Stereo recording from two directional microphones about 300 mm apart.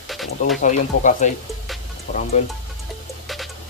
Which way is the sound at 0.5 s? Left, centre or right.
Left.